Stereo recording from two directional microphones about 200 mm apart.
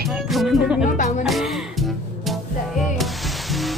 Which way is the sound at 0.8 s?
40° left (ahead or behind).